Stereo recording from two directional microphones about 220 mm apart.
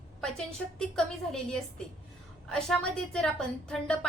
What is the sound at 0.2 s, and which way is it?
A woman's voice, 5° left (ahead or behind).